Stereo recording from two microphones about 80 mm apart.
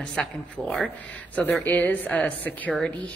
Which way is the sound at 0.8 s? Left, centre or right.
Centre.